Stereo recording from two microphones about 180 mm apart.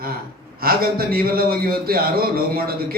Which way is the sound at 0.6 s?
55° right (ahead or behind).